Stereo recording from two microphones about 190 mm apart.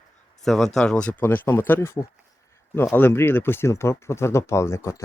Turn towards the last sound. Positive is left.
turn(degrees=15)  # may be behind; listen again after turning